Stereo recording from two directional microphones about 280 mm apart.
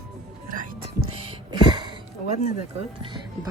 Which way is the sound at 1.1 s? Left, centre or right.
Centre.